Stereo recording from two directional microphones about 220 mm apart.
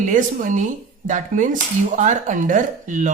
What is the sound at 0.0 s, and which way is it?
Speech, 35° right (ahead or behind).